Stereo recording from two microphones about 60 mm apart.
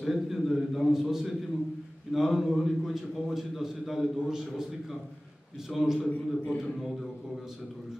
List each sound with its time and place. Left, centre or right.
0.0 s a man's voice: centre
5.7 s a man's voice: centre
6.0 s a man's voice: left
6.6 s a man's voice: centre